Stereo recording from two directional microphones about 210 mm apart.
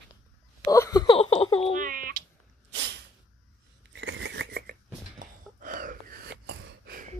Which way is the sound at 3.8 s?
60° right (ahead or behind).